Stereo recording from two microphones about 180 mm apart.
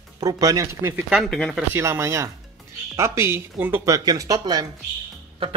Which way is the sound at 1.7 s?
15° right (ahead or behind).